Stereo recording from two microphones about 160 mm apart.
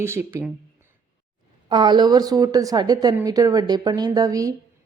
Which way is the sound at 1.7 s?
30° right (ahead or behind).